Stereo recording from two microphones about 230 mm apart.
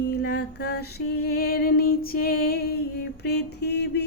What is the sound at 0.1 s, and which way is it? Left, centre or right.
Music, left.